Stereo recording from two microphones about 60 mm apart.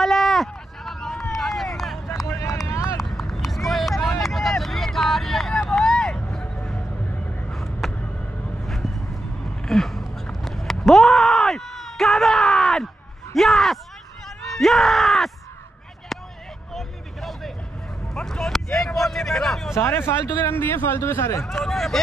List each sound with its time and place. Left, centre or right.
0.0 s run: centre
2.2 s vehicle: left
3.0 s vehicle: centre
7.5 s vehicle: centre
8.6 s a sound: centre
14.6 s groan: centre
16.7 s vehicle: centre
19.7 s speech: left
21.5 s speech: centre